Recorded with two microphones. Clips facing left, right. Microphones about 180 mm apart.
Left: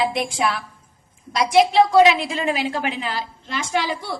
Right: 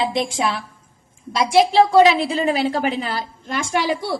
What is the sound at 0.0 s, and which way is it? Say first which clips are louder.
A woman's voice: right 1 dB; 25° right (ahead or behind).